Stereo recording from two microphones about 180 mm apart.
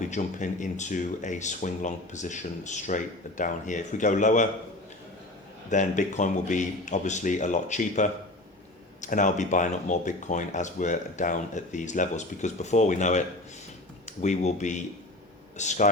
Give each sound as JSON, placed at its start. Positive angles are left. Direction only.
{"t": 0.0, "sound": "speech", "side_deg": 40}
{"t": 5.7, "sound": "speech", "side_deg": 45}